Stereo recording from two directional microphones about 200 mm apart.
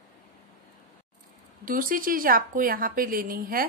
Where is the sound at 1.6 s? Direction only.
45° right (ahead or behind).